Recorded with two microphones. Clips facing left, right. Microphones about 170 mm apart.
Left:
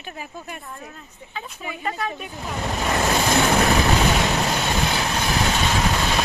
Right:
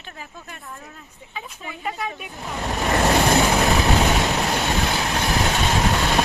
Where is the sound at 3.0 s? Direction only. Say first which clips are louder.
Right 4 dB; 65° right (ahead or behind).